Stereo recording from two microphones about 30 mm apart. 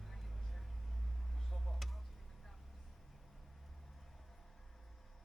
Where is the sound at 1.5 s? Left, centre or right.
Centre.